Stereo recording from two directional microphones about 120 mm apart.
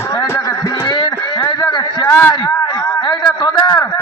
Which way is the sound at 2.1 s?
15° left (ahead or behind).